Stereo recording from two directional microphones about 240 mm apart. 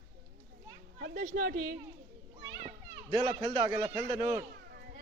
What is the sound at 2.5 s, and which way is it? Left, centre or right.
Children playing, right.